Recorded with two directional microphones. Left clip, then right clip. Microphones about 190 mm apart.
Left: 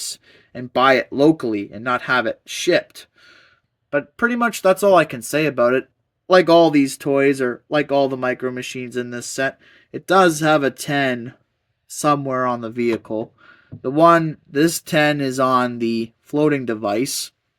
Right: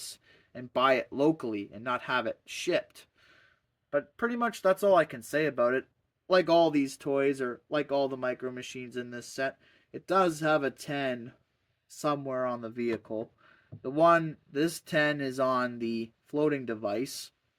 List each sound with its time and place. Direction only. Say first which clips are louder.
0.1 s speech: left 13 dB; 15° left (ahead or behind)